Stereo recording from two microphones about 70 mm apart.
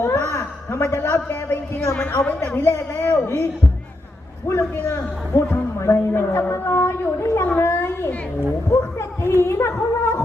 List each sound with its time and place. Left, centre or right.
0.0 s a sound: left
1.9 s a woman's voice: left
4.5 s a man's voice: left